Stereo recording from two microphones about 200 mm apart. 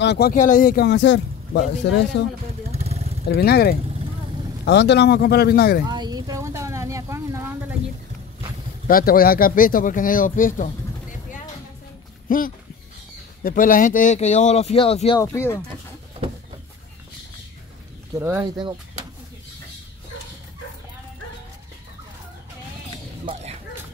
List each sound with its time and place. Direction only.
0.0 s speech: 55° left (ahead or behind)
2.7 s vehicle: 30° right (ahead or behind)
3.3 s speech: 50° left (ahead or behind)
5.9 s a sound: 20° right (ahead or behind)
8.8 s speech: 45° left (ahead or behind); by 15.1 s 30° left (ahead or behind)
15.1 s speech: 15° left (ahead or behind)
18.2 s speech: 15° right (ahead or behind)
23.3 s dog: 25° right (ahead or behind)